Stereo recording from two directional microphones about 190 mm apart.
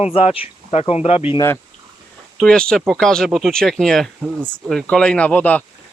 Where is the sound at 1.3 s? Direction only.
15° left (ahead or behind).